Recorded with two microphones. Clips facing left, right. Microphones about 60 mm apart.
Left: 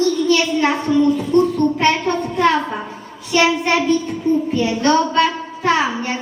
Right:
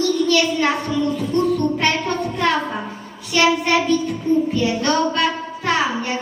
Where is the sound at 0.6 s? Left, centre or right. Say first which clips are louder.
Left 4 dB; centre.